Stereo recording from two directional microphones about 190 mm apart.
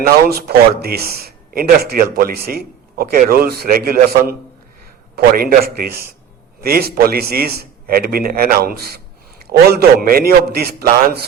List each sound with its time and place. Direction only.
0.3 s speech: 55° right (ahead or behind)